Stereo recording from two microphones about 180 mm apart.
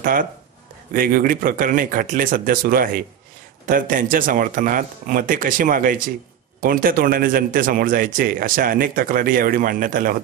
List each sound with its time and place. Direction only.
0.0 s a man's voice: 50° right (ahead or behind)